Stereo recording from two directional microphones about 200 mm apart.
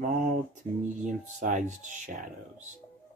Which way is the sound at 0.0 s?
40° right (ahead or behind).